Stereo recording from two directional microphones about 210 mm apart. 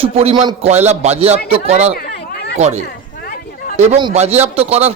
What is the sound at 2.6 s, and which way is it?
Speech, 30° right (ahead or behind).